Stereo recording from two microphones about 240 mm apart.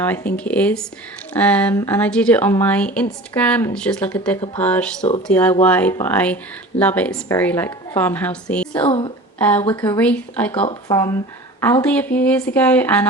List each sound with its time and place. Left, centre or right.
0.0 s speech: centre
8.8 s a woman's voice: left
9.4 s speech: centre
10.5 s speech: left; by 13.1 s centre